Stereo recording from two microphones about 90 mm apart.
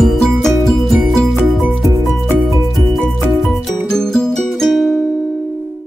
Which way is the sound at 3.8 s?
5° left (ahead or behind).